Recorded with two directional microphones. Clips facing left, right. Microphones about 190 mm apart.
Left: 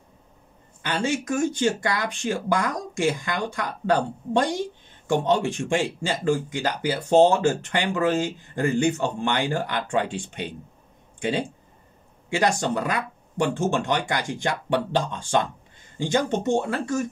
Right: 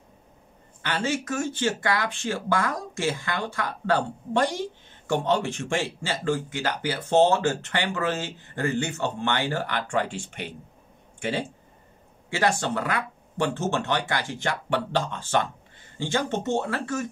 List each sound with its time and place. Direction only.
0.8 s speech: 15° left (ahead or behind)